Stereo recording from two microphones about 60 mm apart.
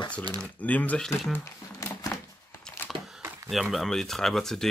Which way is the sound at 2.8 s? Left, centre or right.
Centre.